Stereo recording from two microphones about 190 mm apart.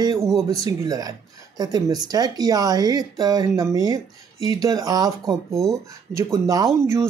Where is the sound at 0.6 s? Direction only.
20° right (ahead or behind).